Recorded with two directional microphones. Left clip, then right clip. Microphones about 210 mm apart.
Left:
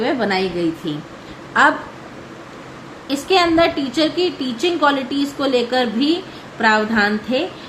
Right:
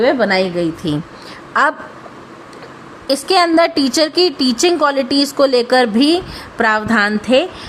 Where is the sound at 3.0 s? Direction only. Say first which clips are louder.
Right 3 dB; 55° right (ahead or behind).